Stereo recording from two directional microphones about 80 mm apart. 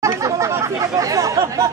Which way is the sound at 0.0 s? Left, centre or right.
Right.